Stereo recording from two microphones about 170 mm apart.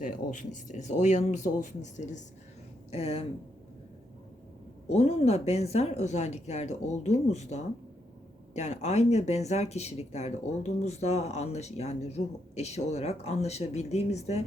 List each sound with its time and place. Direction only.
0.0 s speech: 50° left (ahead or behind)
4.9 s speech: 35° left (ahead or behind)